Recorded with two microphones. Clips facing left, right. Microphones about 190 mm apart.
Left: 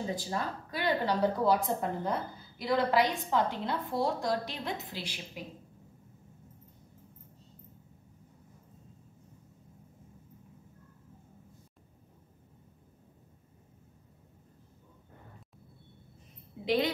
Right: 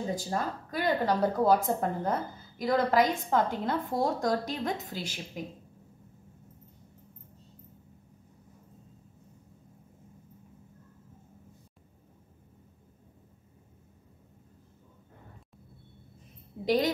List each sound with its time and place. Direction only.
0.1 s a woman's voice: 45° right (ahead or behind)
16.6 s a woman's voice: 45° right (ahead or behind)